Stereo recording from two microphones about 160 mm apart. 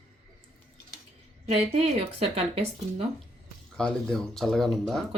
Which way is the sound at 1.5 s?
40° right (ahead or behind).